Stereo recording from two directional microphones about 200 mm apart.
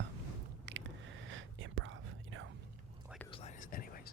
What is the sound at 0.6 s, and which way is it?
Whispering, 65° right (ahead or behind).